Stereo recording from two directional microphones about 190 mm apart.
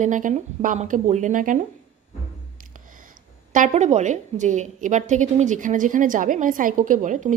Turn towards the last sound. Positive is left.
turn(degrees=-40)  # may be behind; listen again after turning